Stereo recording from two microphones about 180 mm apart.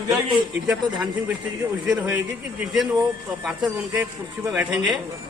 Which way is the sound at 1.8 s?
5° right (ahead or behind).